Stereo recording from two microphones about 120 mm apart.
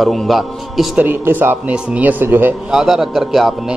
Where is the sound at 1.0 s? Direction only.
15° right (ahead or behind).